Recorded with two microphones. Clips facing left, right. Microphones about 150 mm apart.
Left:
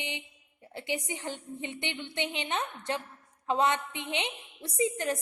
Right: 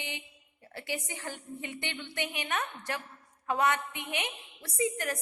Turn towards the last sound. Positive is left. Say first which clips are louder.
# left 2 dB
turn(degrees=25)  # may be behind; listen again after turning